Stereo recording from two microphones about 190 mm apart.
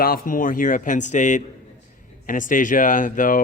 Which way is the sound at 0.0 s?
50° left (ahead or behind).